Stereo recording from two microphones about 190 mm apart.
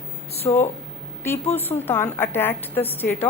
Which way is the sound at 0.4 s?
15° left (ahead or behind).